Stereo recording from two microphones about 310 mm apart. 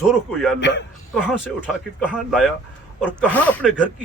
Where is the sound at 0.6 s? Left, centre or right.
Left.